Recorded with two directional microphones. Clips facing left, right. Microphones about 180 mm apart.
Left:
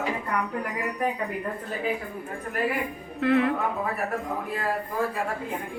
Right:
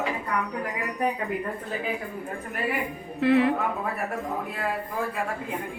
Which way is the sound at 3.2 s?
Centre (ahead or behind).